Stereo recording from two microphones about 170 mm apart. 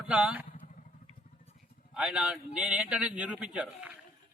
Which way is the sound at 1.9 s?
5° right (ahead or behind).